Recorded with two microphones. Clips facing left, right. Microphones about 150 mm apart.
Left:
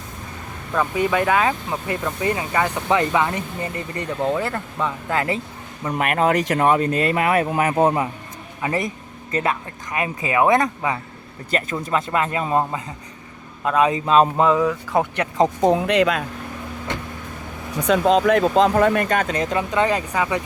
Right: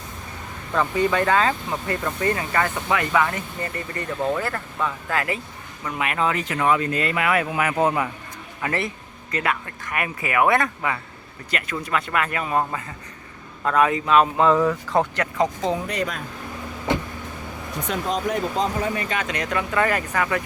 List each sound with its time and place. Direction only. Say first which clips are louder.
0.7 s speech: left 1 dB; 10° left (ahead or behind)
2.9 s speech: left 2 dB; 25° left (ahead or behind)
6.0 s speech: left 5 dB; 50° left (ahead or behind); by 8.1 s 30° left (ahead or behind)
8.6 s speech: left 2 dB; 15° left (ahead or behind)
9.3 s speech: left 3 dB; 25° left (ahead or behind)
14.0 s speech: left 3 dB; 30° left (ahead or behind)
14.3 s speech: left 1 dB; 5° left (ahead or behind)
15.1 s speech: left 3 dB; 20° left (ahead or behind)
15.6 s speech: left 8 dB; 70° left (ahead or behind)
17.8 s speech: left 9 dB; 85° left; by 19.1 s 60° left (ahead or behind)
19.1 s speech: left 6 dB; 45° left (ahead or behind)
19.4 s speech: left 3 dB; 25° left (ahead or behind)